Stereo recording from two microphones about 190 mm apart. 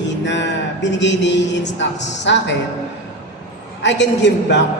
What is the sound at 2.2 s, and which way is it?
Speech, 70° left (ahead or behind).